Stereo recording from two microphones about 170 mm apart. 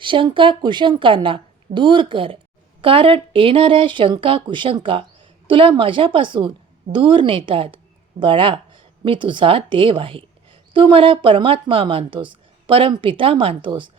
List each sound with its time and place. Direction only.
0.0 s a woman's voice: 30° right (ahead or behind)